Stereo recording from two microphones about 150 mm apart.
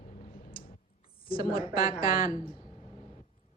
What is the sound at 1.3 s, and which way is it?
Speech, 75° left (ahead or behind).